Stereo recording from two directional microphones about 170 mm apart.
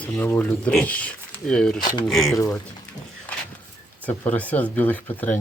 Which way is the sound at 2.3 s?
20° left (ahead or behind).